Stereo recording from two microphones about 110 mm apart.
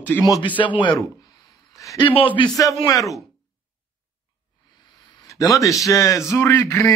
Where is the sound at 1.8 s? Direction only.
30° left (ahead or behind).